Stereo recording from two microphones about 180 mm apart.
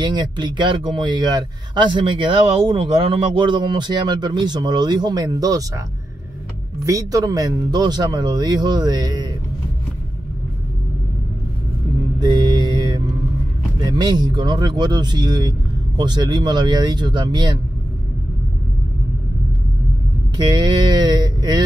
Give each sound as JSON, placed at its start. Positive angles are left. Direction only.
{"t": 0.0, "sound": "speech", "side_deg": -25}
{"t": 6.8, "sound": "speech", "side_deg": -20}
{"t": 12.2, "sound": "mantra", "side_deg": -25}
{"t": 13.7, "sound": "speech", "side_deg": -25}
{"t": 20.3, "sound": "speech", "side_deg": -25}